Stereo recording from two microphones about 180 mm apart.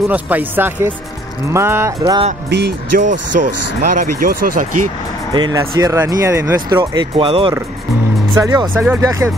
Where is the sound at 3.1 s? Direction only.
45° right (ahead or behind).